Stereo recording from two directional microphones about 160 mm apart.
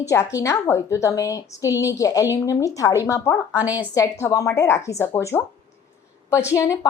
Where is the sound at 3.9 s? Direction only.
20° left (ahead or behind).